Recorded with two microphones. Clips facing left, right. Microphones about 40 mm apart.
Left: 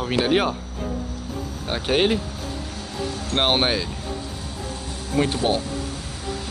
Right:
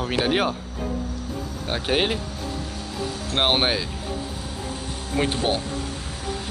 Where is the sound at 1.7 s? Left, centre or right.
Centre.